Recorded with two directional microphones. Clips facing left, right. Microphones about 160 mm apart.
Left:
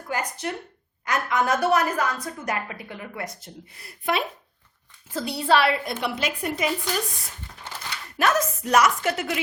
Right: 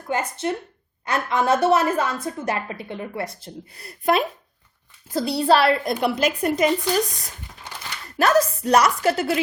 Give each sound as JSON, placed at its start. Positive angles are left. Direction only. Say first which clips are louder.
{"t": 0.1, "sound": "a woman's voice", "louder": "right 5 dB", "side_deg": -25}
{"t": 8.2, "sound": "a woman's voice", "louder": "right 5 dB", "side_deg": -35}